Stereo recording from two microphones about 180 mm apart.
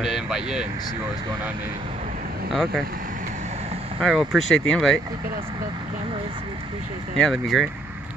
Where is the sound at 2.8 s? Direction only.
50° right (ahead or behind); by 3.9 s 35° right (ahead or behind).